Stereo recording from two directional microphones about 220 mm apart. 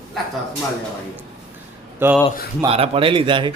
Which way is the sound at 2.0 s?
10° right (ahead or behind).